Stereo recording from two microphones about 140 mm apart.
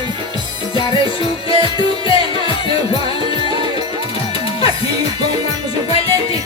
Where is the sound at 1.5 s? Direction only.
40° left (ahead or behind).